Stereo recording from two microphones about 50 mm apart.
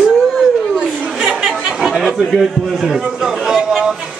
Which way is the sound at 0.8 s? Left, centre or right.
Centre.